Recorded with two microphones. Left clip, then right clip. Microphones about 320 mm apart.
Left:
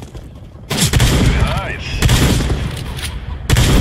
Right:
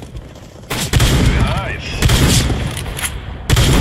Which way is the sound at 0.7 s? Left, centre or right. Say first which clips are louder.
Left 1 dB; centre.